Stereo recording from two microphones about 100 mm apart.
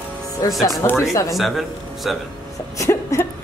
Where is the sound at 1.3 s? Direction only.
Centre (ahead or behind).